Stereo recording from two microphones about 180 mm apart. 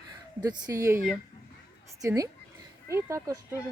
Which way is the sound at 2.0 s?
20° right (ahead or behind).